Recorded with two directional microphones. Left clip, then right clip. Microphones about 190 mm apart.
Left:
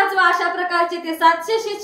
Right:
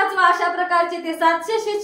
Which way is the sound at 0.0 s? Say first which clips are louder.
Left 1 dB; 15° left (ahead or behind).